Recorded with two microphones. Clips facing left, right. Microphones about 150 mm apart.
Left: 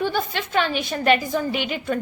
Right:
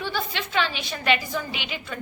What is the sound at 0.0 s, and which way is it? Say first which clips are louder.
A woman's voice: left 5 dB; 45° left (ahead or behind).